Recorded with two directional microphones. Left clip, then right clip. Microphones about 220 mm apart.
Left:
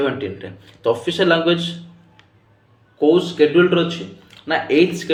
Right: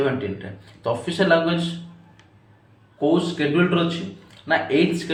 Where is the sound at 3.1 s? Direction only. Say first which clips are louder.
Left 8 dB; 35° left (ahead or behind).